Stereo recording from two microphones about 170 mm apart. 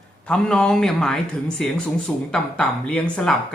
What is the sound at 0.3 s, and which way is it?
A man's voice, 5° left (ahead or behind).